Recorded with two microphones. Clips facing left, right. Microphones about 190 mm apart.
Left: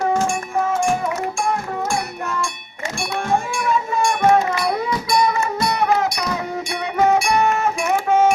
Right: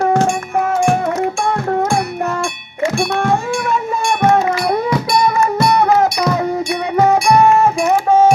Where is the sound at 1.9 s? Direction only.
60° right (ahead or behind).